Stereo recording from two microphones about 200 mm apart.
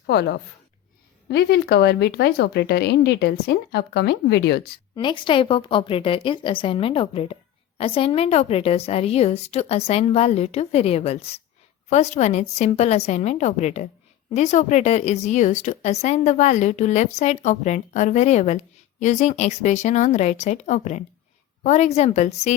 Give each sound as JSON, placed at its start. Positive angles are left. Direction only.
{"t": 0.1, "sound": "speech", "side_deg": 55}
{"t": 4.9, "sound": "a woman's voice", "side_deg": 25}